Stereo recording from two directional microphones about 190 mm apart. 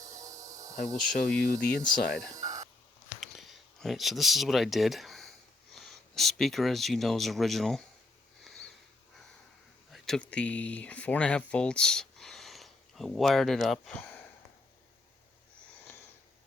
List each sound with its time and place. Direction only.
0.2 s insect: 15° right (ahead or behind)
1.1 s speech: 5° left (ahead or behind)
3.2 s a sound: centre (ahead or behind)
5.7 s speech: centre (ahead or behind)
8.4 s sniff: 5° left (ahead or behind)
9.9 s speech: 5° left (ahead or behind)